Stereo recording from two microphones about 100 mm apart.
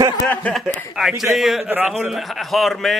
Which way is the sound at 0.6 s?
Centre (ahead or behind).